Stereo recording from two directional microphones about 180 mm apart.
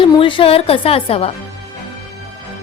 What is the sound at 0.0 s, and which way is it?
A woman's voice, 30° left (ahead or behind).